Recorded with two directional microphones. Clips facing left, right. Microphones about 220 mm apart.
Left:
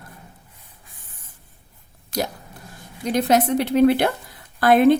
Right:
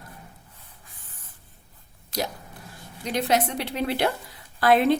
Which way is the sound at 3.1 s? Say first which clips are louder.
Left 6 dB; 45° left (ahead or behind).